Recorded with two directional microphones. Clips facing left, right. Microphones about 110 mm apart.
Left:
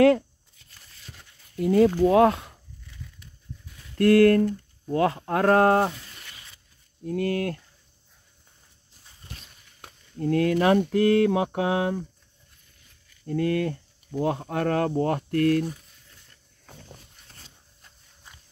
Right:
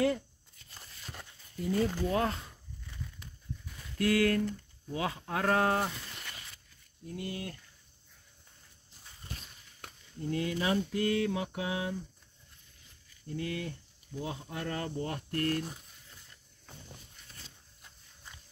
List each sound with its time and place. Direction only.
1.6 s speech: 75° left (ahead or behind)
4.0 s speech: 55° left (ahead or behind)
7.1 s speech: 75° left (ahead or behind)
10.1 s speech: 70° left (ahead or behind)
13.2 s speech: 70° left (ahead or behind)